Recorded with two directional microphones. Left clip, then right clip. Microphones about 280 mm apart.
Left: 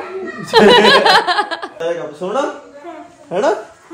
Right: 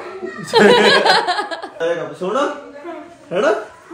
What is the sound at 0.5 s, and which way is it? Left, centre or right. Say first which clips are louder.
Speech: left 3 dB; left.